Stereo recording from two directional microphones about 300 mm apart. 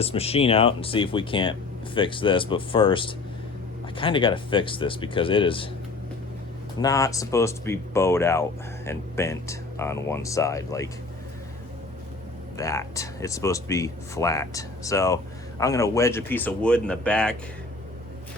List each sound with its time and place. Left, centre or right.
0.0 s speech: centre
6.8 s speech: centre
12.5 s speech: centre